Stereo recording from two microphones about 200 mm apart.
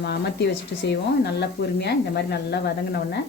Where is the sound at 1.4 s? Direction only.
55° left (ahead or behind).